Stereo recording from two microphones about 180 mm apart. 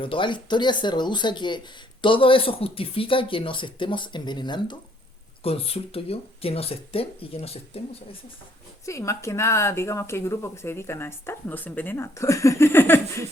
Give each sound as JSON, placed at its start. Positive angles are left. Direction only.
{"t": 0.0, "sound": "speech", "side_deg": 30}
{"t": 8.9, "sound": "speech", "side_deg": 15}